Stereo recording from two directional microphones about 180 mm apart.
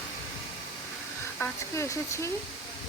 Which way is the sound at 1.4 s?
15° left (ahead or behind).